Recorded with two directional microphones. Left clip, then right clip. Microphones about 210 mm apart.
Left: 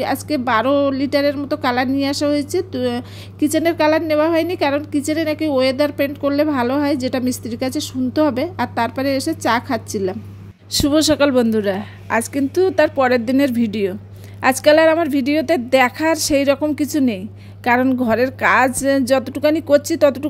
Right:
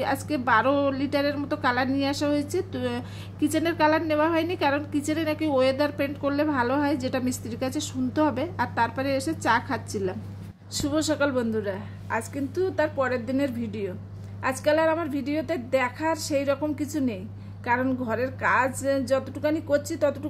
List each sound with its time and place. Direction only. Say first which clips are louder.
0.0 s a woman's voice: left 6 dB; 25° left (ahead or behind)